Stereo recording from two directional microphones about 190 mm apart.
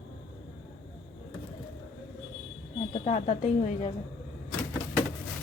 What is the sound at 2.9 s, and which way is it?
A woman's voice, 35° left (ahead or behind).